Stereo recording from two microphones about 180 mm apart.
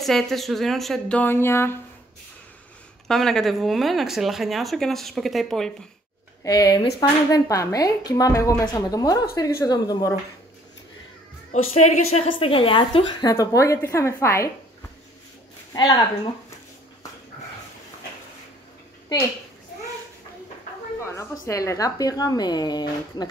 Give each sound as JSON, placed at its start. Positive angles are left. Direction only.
{"t": 0.0, "sound": "speech", "side_deg": 0}
{"t": 3.1, "sound": "speech", "side_deg": 0}
{"t": 6.4, "sound": "a woman's voice", "side_deg": 20}
{"t": 11.5, "sound": "a woman's voice", "side_deg": 40}
{"t": 13.3, "sound": "a woman's voice", "side_deg": 20}
{"t": 15.7, "sound": "a woman's voice", "side_deg": 20}
{"t": 21.0, "sound": "a woman's voice", "side_deg": 15}